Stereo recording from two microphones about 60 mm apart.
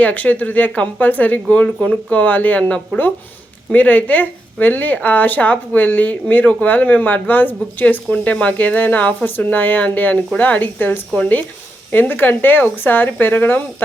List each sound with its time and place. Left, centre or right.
0.0 s a woman's voice: left